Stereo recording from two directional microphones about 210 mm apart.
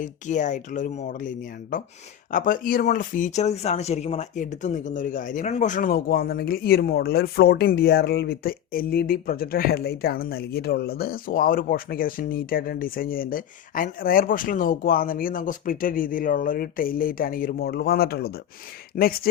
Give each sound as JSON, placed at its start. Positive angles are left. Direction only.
{"t": 0.0, "sound": "speech", "side_deg": 35}